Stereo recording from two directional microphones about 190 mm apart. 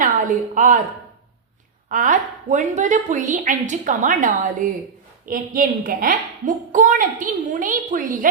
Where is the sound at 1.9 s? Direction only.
40° right (ahead or behind).